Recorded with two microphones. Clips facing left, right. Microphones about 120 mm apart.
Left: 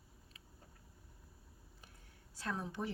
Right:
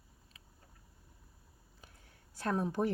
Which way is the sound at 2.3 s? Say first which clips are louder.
Right 8 dB; 55° right (ahead or behind).